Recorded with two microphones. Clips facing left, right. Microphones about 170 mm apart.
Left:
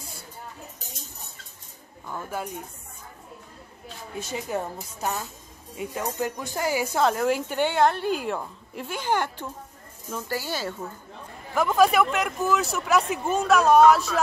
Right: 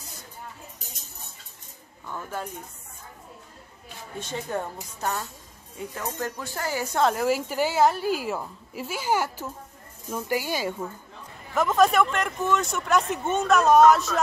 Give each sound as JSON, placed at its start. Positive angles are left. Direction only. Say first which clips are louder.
{"t": 2.0, "sound": "speech", "louder": "left 1 dB", "side_deg": 10}
{"t": 4.2, "sound": "speech", "louder": "left 1 dB", "side_deg": 10}
{"t": 11.5, "sound": "speech", "louder": "even", "side_deg": 0}